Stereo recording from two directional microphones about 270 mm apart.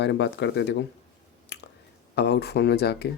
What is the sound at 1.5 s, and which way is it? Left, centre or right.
Chewing, left.